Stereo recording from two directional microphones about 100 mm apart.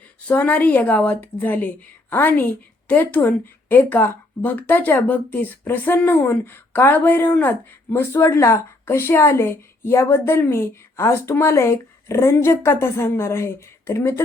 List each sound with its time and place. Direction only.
0.3 s a woman's voice: 15° left (ahead or behind)